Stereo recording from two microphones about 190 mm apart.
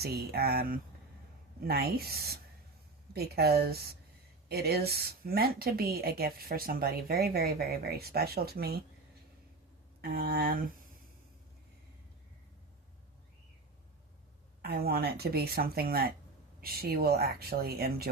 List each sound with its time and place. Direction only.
0.0 s a woman's voice: 55° right (ahead or behind)
10.0 s a woman's voice: 50° right (ahead or behind)
14.6 s speech: 55° right (ahead or behind)